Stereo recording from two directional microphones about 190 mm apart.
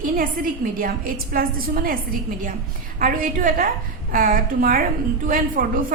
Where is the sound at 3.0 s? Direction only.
50° right (ahead or behind).